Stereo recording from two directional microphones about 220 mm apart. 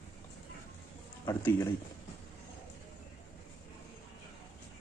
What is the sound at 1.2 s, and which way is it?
Speech, 10° left (ahead or behind).